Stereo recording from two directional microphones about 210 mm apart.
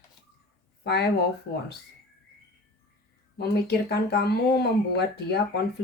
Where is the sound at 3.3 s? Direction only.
50° left (ahead or behind).